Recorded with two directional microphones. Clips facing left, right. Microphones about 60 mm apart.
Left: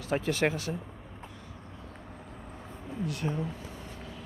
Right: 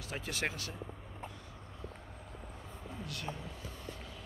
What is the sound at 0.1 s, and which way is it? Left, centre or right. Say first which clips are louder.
Speech: left 10 dB; left.